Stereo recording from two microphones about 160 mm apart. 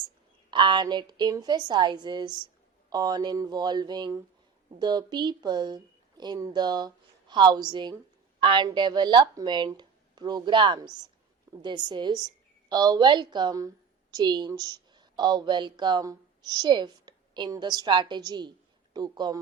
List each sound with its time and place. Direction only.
0.5 s a woman's voice: 30° right (ahead or behind)